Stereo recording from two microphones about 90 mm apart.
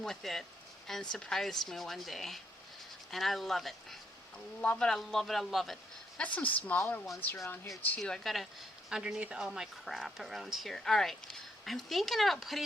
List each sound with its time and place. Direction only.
0.0 s speech: 5° left (ahead or behind)
4.6 s a woman's voice: 15° left (ahead or behind)
4.9 s speech: 5° left (ahead or behind)
6.1 s a woman's voice: 15° left (ahead or behind)
8.0 s speech: 5° left (ahead or behind)